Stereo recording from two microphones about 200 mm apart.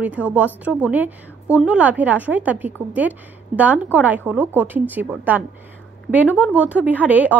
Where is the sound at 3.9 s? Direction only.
10° right (ahead or behind).